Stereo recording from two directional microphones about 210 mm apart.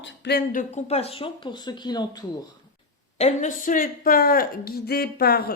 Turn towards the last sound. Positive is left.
turn(degrees=45)  # may be behind; listen again after turning